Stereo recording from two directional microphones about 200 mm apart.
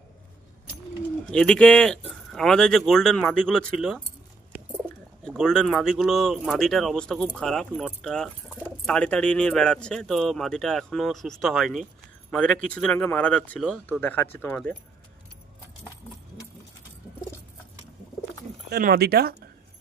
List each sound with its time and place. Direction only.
1.3 s speech: 5° left (ahead or behind)
5.2 s speech: 5° left (ahead or behind)
18.7 s speech: 50° right (ahead or behind)